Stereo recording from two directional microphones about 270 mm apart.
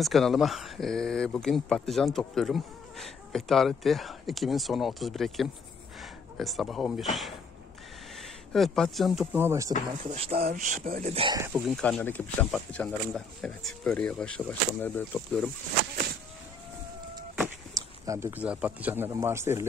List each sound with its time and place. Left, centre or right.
0.0 s speech: centre
8.2 s speech: centre
10.0 s speech: right
11.7 s speech: centre
17.7 s speech: centre